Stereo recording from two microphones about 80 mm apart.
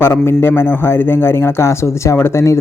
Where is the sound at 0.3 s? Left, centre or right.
Left.